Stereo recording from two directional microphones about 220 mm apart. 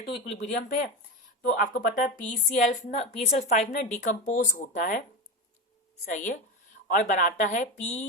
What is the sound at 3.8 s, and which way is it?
A woman's voice, 35° left (ahead or behind).